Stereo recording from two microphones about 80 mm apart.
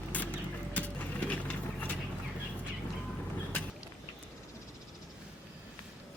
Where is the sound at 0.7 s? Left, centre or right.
Centre.